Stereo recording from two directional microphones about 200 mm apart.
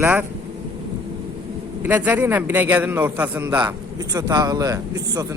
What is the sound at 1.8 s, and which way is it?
Speech, 10° right (ahead or behind).